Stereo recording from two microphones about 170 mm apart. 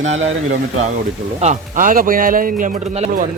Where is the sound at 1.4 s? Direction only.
45° right (ahead or behind).